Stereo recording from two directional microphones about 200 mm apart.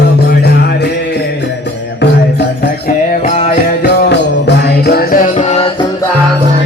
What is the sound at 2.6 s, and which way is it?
Music, 45° left (ahead or behind).